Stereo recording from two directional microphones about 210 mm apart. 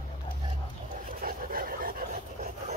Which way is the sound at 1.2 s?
45° right (ahead or behind).